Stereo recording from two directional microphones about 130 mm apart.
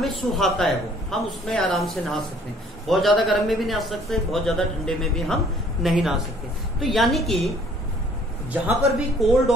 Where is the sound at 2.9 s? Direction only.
Centre (ahead or behind).